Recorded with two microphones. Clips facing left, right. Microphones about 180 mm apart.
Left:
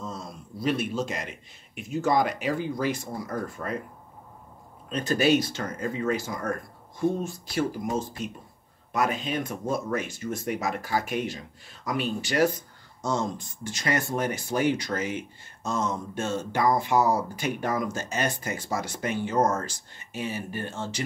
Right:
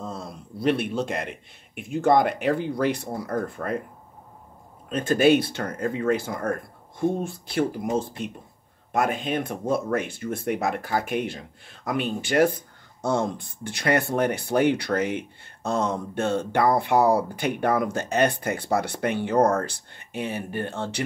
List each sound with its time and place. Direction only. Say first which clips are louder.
0.0 s a sound: right 2 dB; 60° right (ahead or behind)
1.8 s speech: right 4 dB; 55° right (ahead or behind)
4.8 s speech: right 4 dB; 50° right (ahead or behind)